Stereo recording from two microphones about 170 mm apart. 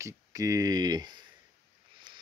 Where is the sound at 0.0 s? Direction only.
20° right (ahead or behind).